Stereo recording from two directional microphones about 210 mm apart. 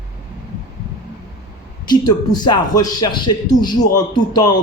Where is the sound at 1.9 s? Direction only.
20° left (ahead or behind).